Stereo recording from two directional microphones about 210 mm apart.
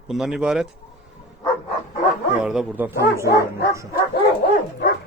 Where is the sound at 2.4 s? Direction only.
5° right (ahead or behind).